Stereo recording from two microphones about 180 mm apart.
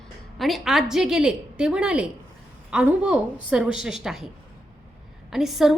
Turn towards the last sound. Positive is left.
turn(degrees=0)  # may be behind; listen again after turning